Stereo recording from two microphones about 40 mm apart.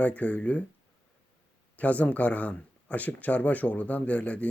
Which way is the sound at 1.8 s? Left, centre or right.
Left.